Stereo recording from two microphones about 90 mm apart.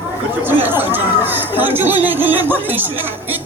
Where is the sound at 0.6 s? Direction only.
25° right (ahead or behind).